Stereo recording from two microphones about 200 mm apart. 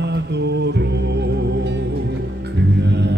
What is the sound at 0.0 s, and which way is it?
Music, 60° right (ahead or behind).